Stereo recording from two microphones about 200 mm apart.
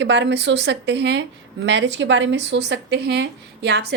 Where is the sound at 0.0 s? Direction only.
60° right (ahead or behind).